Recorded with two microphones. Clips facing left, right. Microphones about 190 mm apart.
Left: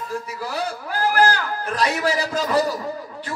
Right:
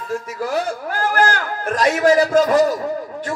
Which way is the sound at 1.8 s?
55° right (ahead or behind).